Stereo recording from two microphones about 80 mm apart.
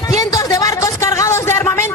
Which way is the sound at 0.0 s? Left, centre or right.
Left.